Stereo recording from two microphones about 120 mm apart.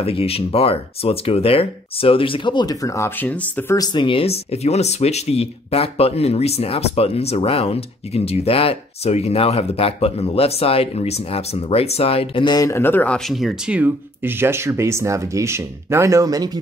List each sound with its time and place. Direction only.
0.0 s speech: 55° left (ahead or behind); by 3.1 s 25° left (ahead or behind)
3.2 s speech: 15° left (ahead or behind)
3.7 s speech: 35° left (ahead or behind); by 12.4 s 55° left (ahead or behind)
12.4 s speech: 30° left (ahead or behind)
12.7 s speech: 15° left (ahead or behind)
13.3 s speech: 5° right (ahead or behind); by 16.5 s 30° right (ahead or behind)